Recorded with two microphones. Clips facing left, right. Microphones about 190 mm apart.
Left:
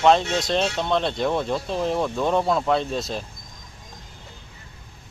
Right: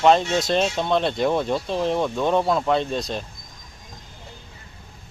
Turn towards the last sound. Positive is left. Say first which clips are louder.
# right 1 dB
turn(degrees=0)  # may be behind; listen again after turning